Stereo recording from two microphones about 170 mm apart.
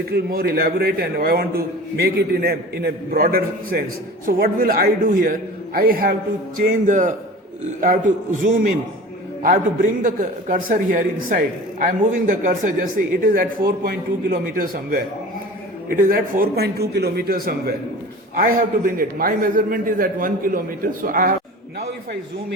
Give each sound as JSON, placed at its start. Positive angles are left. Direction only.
{"t": 0.1, "sound": "a man's voice", "side_deg": -65}
{"t": 10.0, "sound": "a man's voice", "side_deg": -50}